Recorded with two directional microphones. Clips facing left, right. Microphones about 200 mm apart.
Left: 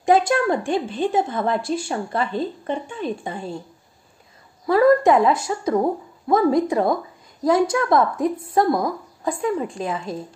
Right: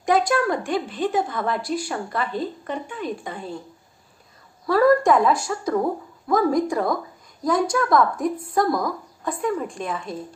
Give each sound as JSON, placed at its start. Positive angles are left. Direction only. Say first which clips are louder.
{"t": 0.0, "sound": "a woman's voice", "louder": "left 3 dB", "side_deg": 25}
{"t": 4.6, "sound": "a woman's voice", "louder": "left 2 dB", "side_deg": 20}